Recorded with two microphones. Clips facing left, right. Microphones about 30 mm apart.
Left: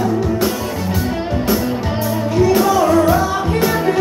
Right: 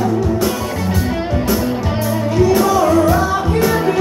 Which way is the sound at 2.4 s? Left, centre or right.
Centre.